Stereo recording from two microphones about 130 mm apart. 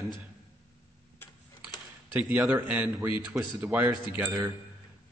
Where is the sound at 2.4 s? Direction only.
10° right (ahead or behind).